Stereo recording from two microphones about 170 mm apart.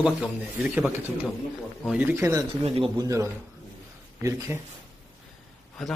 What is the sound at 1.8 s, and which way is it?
Speech, 5° right (ahead or behind).